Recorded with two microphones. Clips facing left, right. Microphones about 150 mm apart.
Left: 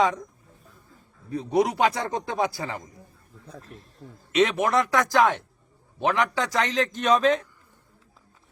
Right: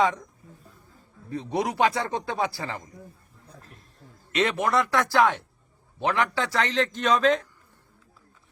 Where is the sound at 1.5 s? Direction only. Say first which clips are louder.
Left 2 dB; 20° left (ahead or behind).